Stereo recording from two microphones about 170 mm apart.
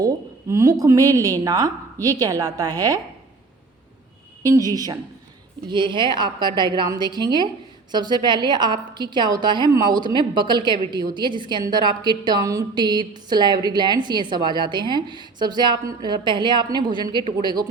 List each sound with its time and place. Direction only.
0.0 s a woman's voice: 20° right (ahead or behind)
4.4 s a woman's voice: 20° right (ahead or behind)